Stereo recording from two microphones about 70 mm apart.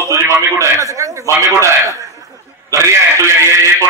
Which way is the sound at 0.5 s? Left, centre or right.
Right.